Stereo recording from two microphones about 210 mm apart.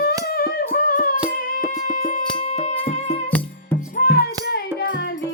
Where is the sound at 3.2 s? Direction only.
10° left (ahead or behind).